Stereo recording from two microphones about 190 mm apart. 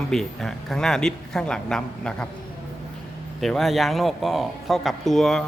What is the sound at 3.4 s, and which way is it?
A man's voice, centre (ahead or behind).